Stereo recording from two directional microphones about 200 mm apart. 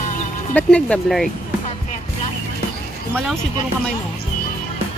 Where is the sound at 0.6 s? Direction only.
5° left (ahead or behind).